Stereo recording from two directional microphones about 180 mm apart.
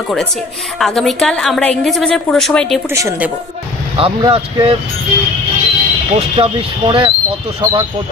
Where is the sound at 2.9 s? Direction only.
15° right (ahead or behind).